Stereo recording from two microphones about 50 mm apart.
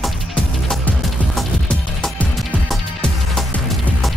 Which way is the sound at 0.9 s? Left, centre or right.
Left.